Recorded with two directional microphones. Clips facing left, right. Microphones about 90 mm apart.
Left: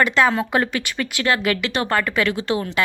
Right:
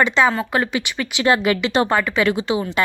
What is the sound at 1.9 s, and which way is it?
Speech, 10° right (ahead or behind).